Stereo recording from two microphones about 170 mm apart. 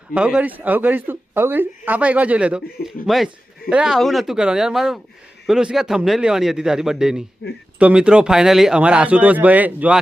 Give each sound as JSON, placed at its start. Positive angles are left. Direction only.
{"t": 0.1, "sound": "a man's voice", "side_deg": -5}